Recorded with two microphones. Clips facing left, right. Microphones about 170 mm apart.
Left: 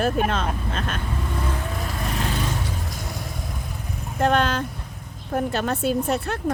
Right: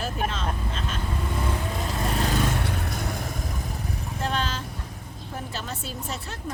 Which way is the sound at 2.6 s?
65° right (ahead or behind).